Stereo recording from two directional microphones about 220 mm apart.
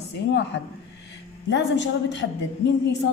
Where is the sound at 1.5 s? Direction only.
55° left (ahead or behind).